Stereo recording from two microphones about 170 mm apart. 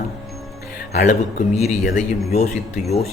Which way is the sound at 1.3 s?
40° left (ahead or behind).